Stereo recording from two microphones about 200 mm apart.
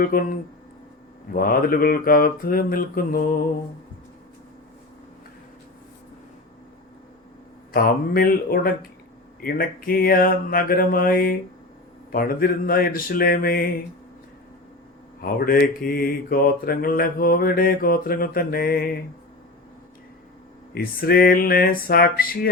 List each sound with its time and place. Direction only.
0.0 s mantra: 45° left (ahead or behind)
1.3 s mantra: 45° left (ahead or behind)
7.7 s mantra: 50° left (ahead or behind)
15.2 s mantra: 50° left (ahead or behind)
20.7 s mantra: 50° left (ahead or behind)